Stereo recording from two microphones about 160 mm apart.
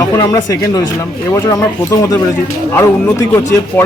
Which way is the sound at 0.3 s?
20° left (ahead or behind).